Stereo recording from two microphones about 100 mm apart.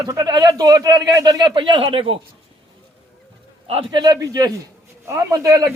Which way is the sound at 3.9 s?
40° right (ahead or behind).